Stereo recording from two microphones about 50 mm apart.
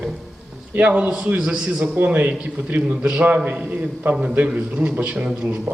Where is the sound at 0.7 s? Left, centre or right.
Right.